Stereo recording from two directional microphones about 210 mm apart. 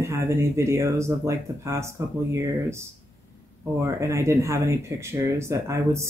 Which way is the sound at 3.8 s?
15° right (ahead or behind).